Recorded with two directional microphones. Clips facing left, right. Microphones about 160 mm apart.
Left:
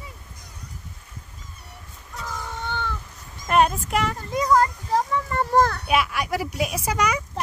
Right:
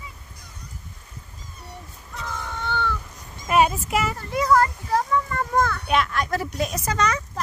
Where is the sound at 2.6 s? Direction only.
15° left (ahead or behind).